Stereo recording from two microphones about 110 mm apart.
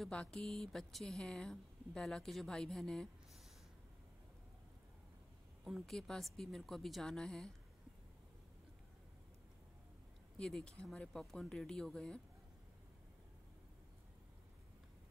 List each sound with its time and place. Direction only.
0.0 s speech: 5° left (ahead or behind)
5.6 s speech: centre (ahead or behind)
10.3 s speech: 5° left (ahead or behind)